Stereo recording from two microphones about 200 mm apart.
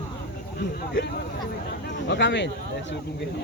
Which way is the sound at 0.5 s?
55° left (ahead or behind).